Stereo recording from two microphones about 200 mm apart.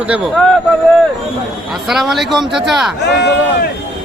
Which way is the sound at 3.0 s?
55° left (ahead or behind).